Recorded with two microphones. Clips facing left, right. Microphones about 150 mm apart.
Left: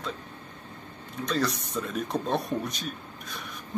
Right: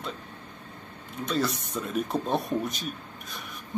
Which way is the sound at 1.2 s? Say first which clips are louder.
Even; centre (ahead or behind).